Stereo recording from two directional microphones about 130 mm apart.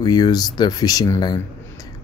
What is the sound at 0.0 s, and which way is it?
Speech, 30° left (ahead or behind).